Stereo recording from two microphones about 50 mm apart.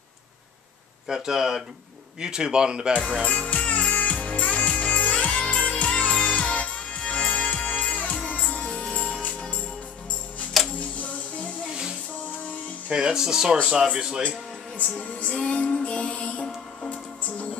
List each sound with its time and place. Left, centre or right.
1.0 s speech: centre
3.3 s music: left
10.6 s music: centre
11.0 s music: left
12.9 s speech: centre
14.8 s music: left
16.3 s music: centre